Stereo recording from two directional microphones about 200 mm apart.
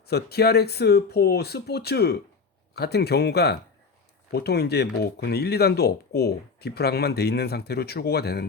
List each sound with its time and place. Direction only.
0.1 s speech: 55° left (ahead or behind)